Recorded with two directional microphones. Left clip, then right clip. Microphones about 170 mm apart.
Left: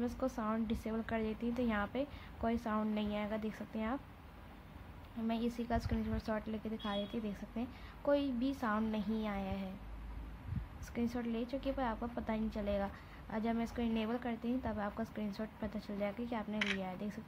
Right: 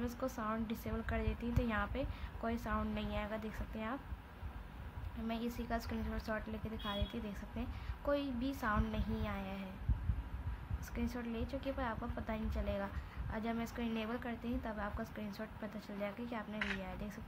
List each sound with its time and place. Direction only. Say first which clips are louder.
0.0 s a woman's voice: left 2 dB; 15° left (ahead or behind)
5.3 s a woman's voice: left 3 dB; 15° left (ahead or behind)
11.0 s a woman's voice: left 4 dB; 15° left (ahead or behind)